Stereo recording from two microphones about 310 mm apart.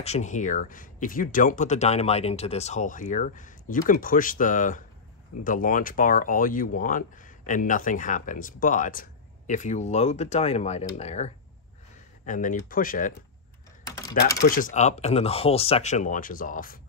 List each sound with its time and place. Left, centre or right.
0.0 s speech: left
14.4 s speech: left